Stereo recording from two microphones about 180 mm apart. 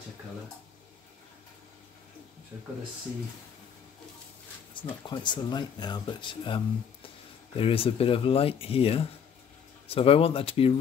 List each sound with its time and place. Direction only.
4.7 s speech: 25° left (ahead or behind)